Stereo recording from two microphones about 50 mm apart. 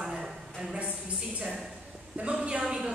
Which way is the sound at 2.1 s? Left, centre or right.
Right.